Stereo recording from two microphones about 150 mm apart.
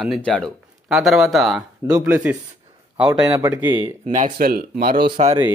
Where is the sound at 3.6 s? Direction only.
35° right (ahead or behind).